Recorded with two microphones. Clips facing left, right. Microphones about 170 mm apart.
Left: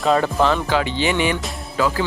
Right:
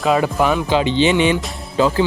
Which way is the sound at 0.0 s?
5° right (ahead or behind).